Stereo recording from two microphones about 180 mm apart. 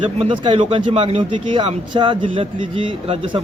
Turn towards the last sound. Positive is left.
turn(degrees=-30)  # may be behind; listen again after turning